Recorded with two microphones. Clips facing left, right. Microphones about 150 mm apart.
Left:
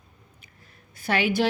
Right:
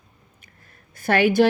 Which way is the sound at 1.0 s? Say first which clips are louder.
Right 6 dB; 50° right (ahead or behind).